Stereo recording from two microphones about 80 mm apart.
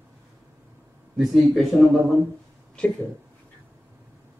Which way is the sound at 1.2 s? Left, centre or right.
Centre.